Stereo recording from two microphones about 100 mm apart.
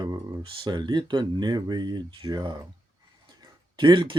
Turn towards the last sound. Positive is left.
turn(degrees=-50)  # may be behind; listen again after turning